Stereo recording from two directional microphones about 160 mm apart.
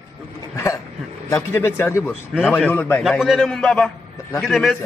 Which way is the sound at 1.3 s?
15° left (ahead or behind).